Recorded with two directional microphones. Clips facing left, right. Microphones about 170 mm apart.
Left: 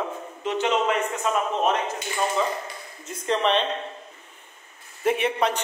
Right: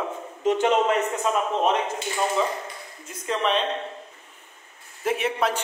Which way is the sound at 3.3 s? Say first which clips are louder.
Left 2 dB; 5° right (ahead or behind).